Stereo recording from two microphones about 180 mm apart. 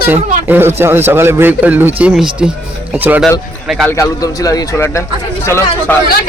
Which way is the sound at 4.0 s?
20° left (ahead or behind).